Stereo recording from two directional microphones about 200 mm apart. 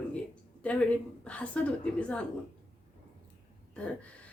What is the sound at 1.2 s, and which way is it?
Speech, 5° left (ahead or behind).